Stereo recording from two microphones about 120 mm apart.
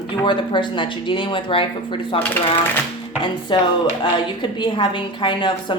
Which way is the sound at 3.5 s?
40° left (ahead or behind).